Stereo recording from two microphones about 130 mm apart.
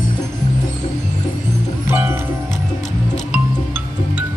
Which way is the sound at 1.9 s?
20° right (ahead or behind).